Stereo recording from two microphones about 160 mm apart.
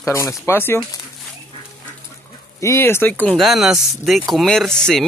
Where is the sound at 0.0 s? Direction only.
20° left (ahead or behind).